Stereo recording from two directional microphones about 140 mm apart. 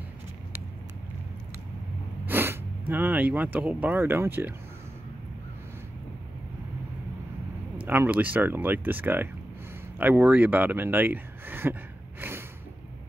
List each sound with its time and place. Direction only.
2.2 s sneeze: 15° right (ahead or behind)
2.9 s speech: 15° right (ahead or behind)
7.8 s speech: 15° right (ahead or behind)
12.2 s snort: 15° right (ahead or behind)